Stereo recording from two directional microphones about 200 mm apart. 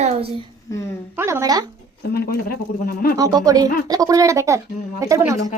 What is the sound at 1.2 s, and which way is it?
Speech, 15° right (ahead or behind).